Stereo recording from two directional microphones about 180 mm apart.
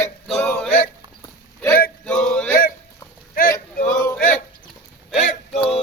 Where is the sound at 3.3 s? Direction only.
55° left (ahead or behind).